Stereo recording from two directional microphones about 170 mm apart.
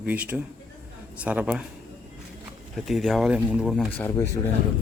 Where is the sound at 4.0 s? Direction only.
15° left (ahead or behind).